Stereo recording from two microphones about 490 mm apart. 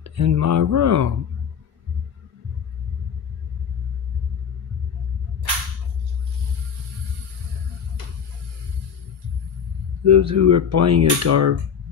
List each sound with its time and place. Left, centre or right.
0.0 s speech: right
10.0 s speech: right